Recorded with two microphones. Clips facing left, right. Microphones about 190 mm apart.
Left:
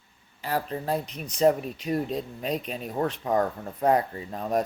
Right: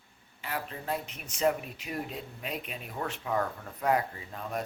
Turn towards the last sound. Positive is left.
turn(degrees=40)  # may be behind; listen again after turning